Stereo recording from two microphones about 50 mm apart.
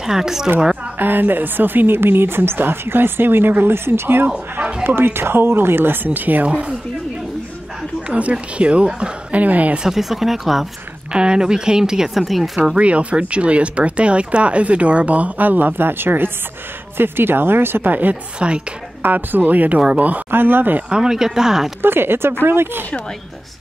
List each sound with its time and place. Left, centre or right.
0.0 s speech: centre
0.9 s a woman's voice: right
6.0 s speech: right
8.1 s speech: right
9.8 s speech: centre
11.1 s speech: centre
12.7 s a woman's voice: right
18.4 s speech: right
19.0 s speech: right
20.2 s speech: right
20.9 s speech: centre
21.8 s a woman's voice: right